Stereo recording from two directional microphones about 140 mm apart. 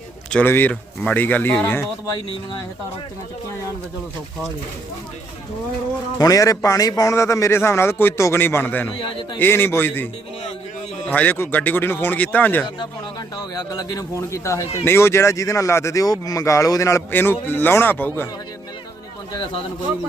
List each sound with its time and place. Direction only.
0.3 s speech: 10° left (ahead or behind)
6.1 s speech: 25° left (ahead or behind)
9.0 s speech: 35° left (ahead or behind)
9.4 s speech: 15° left (ahead or behind)
12.6 s speech: 30° left (ahead or behind); by 18.3 s 15° left (ahead or behind)